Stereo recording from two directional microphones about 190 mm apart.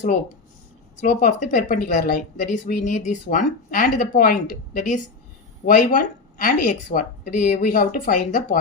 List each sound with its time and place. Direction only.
1.0 s speech: 45° left (ahead or behind)